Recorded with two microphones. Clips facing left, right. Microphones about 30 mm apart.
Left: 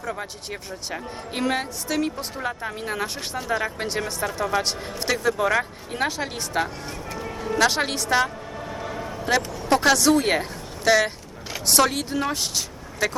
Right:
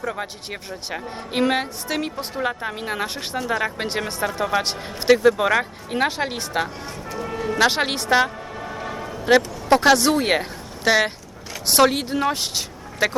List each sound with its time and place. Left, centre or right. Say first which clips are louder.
0.0 s speech: right 3 dB; centre
8.1 s music: right 4 dB; right
9.0 s speech: right 6 dB; centre